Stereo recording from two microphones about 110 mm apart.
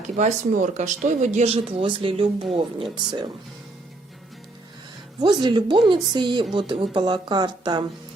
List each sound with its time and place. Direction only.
0.2 s speech: 90° right; by 3.2 s 45° right (ahead or behind)
5.2 s speech: 45° right (ahead or behind)